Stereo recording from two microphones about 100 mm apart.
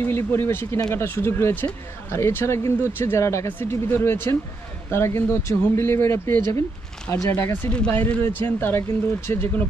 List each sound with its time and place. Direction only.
0.0 s speech: 25° left (ahead or behind)
0.7 s speech: 40° left (ahead or behind)
1.0 s speech: 25° left (ahead or behind)